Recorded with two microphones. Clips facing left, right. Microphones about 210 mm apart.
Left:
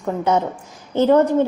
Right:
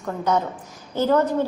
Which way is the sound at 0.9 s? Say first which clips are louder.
Left 5 dB; 20° left (ahead or behind).